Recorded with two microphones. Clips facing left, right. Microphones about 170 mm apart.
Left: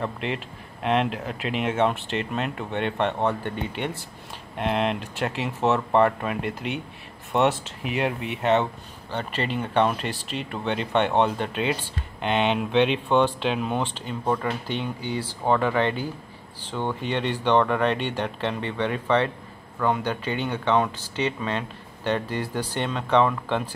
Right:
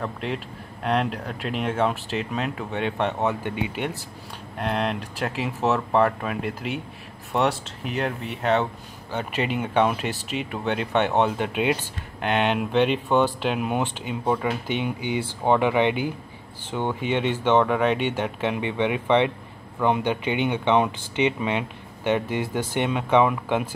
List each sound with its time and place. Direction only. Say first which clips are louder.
0.0 s speech: even; centre (ahead or behind)
9.1 s speech: right 2 dB; 10° right (ahead or behind)